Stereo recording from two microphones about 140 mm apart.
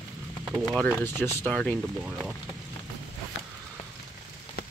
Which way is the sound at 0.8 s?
15° left (ahead or behind).